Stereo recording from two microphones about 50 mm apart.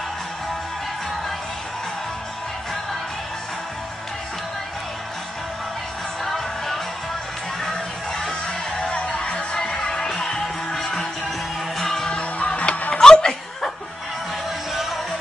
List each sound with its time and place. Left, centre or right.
6.2 s music: centre
8.3 s music: left
12.2 s music: left
14.7 s music: centre